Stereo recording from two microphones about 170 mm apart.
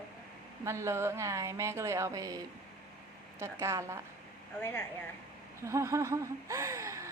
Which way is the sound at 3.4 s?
15° right (ahead or behind).